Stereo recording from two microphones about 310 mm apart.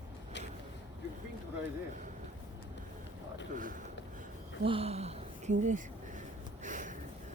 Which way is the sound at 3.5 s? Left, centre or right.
Right.